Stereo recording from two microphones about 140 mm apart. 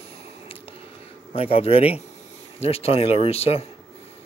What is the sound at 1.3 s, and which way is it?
Speech, 45° left (ahead or behind).